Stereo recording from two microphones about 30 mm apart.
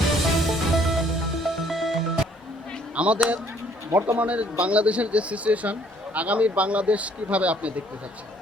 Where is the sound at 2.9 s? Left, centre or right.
Right.